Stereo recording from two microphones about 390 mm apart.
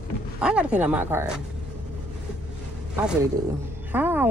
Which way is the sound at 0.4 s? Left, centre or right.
Centre.